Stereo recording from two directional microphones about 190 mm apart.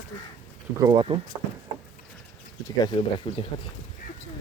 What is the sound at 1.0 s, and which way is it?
Speech, 25° right (ahead or behind).